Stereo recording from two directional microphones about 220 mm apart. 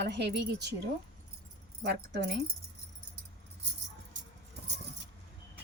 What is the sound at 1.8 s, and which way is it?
Speech, 50° right (ahead or behind).